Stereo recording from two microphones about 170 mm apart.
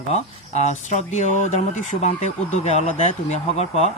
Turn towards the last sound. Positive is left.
turn(degrees=40)  # may be behind; listen again after turning